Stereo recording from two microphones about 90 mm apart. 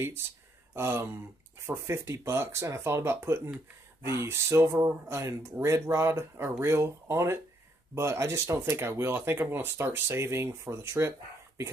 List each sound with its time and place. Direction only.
0.7 s speech: 30° right (ahead or behind)